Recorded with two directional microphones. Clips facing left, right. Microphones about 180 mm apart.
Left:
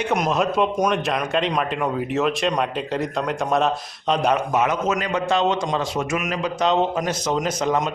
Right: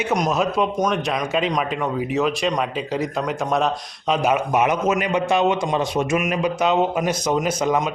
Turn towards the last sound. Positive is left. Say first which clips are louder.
# right 1 dB
turn(degrees=-10)  # may be behind; listen again after turning